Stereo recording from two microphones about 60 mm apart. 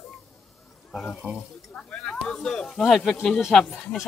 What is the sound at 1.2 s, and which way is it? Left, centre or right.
Speech, centre.